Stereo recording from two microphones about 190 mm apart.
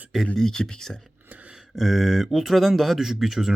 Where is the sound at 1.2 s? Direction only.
10° right (ahead or behind).